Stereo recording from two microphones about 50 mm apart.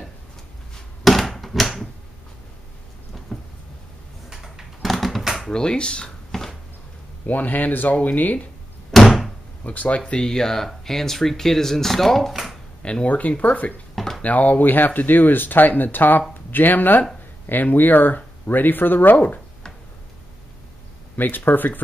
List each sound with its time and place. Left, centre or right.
1.0 s a sound: centre
4.3 s power windows: centre
4.8 s a sound: centre
5.5 s speech: centre
7.2 s speech: left
8.9 s door: centre
9.6 s speech: left
10.2 s speech: centre
12.8 s speech: left
13.9 s drawer open or close: centre
14.2 s speech: left
21.2 s speech: left